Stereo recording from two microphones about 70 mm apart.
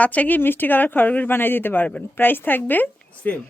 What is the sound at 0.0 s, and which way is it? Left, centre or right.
A woman's voice, left.